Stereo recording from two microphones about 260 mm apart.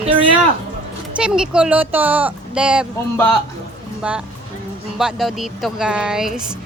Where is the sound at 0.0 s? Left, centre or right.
Centre.